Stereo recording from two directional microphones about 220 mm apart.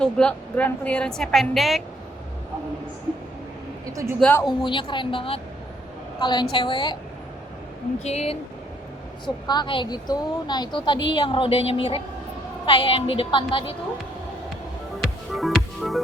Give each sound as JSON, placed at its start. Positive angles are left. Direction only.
{"t": 0.0, "sound": "a woman's voice", "side_deg": 5}
{"t": 4.2, "sound": "speech", "side_deg": 10}
{"t": 4.4, "sound": "a woman's voice", "side_deg": 20}
{"t": 8.0, "sound": "a woman's voice", "side_deg": 30}
{"t": 15.0, "sound": "music", "side_deg": 0}